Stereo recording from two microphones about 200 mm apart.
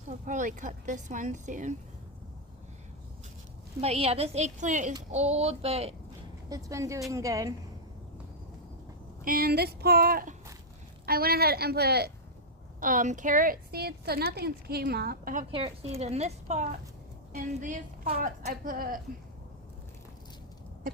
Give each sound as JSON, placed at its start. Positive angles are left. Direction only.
{"t": 0.1, "sound": "speech", "side_deg": -40}
{"t": 3.8, "sound": "speech", "side_deg": -30}
{"t": 6.5, "sound": "a woman's voice", "side_deg": -15}
{"t": 9.2, "sound": "a woman's voice", "side_deg": -45}
{"t": 12.8, "sound": "a woman's voice", "side_deg": -40}
{"t": 15.5, "sound": "a woman's voice", "side_deg": -30}
{"t": 20.9, "sound": "a sound", "side_deg": -45}